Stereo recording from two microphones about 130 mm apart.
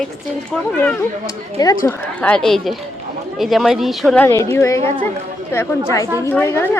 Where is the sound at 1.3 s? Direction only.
30° left (ahead or behind).